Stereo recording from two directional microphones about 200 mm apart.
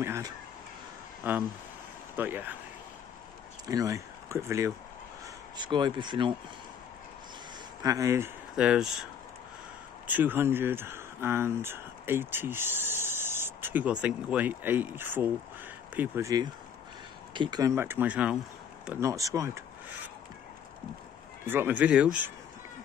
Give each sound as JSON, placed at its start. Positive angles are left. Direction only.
{"t": 0.0, "sound": "a sound", "side_deg": -10}
{"t": 1.2, "sound": "speech", "side_deg": -10}
{"t": 3.6, "sound": "speech", "side_deg": -15}
{"t": 7.8, "sound": "speech", "side_deg": -15}
{"t": 8.5, "sound": "speech", "side_deg": -5}
{"t": 10.0, "sound": "speech", "side_deg": -10}
{"t": 21.5, "sound": "speech", "side_deg": -10}